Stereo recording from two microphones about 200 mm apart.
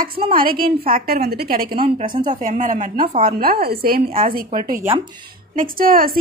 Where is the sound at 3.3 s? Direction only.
50° right (ahead or behind).